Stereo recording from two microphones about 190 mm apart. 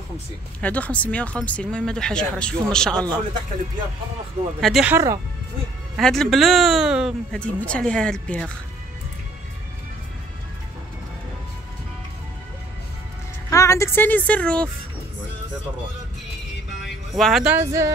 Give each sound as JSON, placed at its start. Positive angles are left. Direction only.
{"t": 0.6, "sound": "speech", "side_deg": 5}
{"t": 4.6, "sound": "speech", "side_deg": 0}
{"t": 4.9, "sound": "speech", "side_deg": -15}
{"t": 5.9, "sound": "speech", "side_deg": 0}
{"t": 13.5, "sound": "a woman's voice", "side_deg": 15}
{"t": 17.1, "sound": "speech", "side_deg": 0}
{"t": 17.6, "sound": "speech", "side_deg": -15}